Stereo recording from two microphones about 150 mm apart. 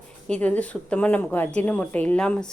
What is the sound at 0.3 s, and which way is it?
A woman's voice, 10° left (ahead or behind).